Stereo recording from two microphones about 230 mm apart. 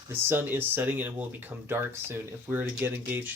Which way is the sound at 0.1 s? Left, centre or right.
Centre.